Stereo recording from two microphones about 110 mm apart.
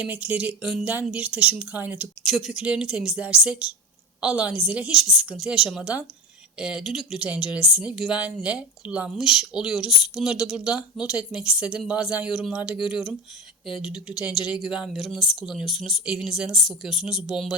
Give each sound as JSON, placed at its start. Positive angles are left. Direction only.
{"t": 0.0, "sound": "speech", "side_deg": -15}
{"t": 2.3, "sound": "speech", "side_deg": -5}